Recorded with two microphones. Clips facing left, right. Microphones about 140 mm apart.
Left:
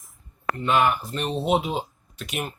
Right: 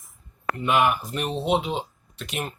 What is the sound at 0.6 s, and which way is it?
Speech, 15° right (ahead or behind).